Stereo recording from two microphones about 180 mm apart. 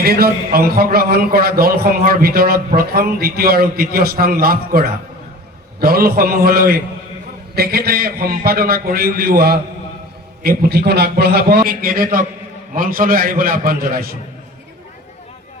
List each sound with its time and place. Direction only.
0.0 s a man's voice: 60° right (ahead or behind)